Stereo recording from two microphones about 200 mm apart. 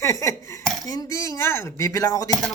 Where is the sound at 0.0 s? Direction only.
15° left (ahead or behind).